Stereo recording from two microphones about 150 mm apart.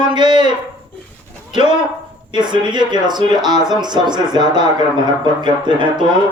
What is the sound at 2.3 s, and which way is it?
Speech, 30° right (ahead or behind).